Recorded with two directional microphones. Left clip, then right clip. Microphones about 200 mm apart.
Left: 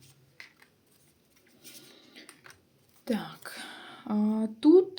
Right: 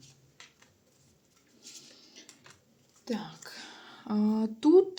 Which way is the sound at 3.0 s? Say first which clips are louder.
Left 3 dB; 30° left (ahead or behind).